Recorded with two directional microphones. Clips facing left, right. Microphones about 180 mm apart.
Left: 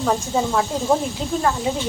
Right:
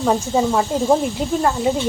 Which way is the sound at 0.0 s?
5° right (ahead or behind).